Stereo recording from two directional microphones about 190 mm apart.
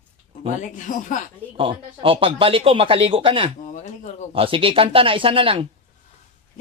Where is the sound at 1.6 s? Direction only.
30° right (ahead or behind).